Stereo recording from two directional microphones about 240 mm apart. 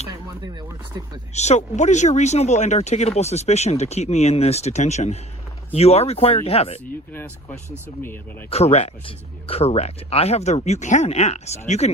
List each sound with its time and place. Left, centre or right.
0.4 s speech: centre
1.3 s speech: left
7.1 s speech: centre
8.4 s speech: left